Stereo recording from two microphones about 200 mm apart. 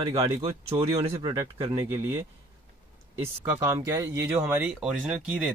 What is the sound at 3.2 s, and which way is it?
Speech, 10° right (ahead or behind).